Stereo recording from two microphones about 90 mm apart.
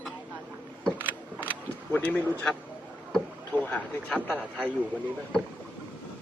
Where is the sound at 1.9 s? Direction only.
15° left (ahead or behind).